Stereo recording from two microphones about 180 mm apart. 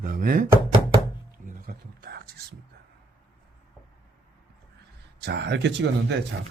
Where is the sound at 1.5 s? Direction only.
55° right (ahead or behind).